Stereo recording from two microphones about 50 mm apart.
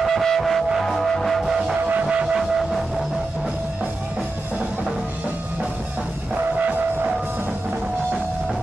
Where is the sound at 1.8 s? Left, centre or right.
Right.